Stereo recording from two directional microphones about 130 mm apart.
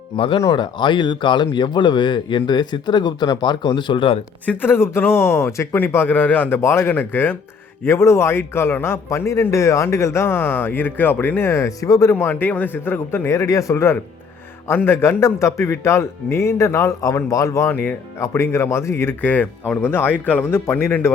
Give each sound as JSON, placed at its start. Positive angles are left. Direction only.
{"t": 0.2, "sound": "speech", "side_deg": 45}
{"t": 4.4, "sound": "a man's voice", "side_deg": 15}